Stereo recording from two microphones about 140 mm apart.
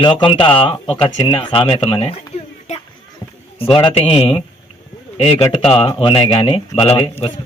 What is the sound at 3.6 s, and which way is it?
A man's voice, 40° left (ahead or behind).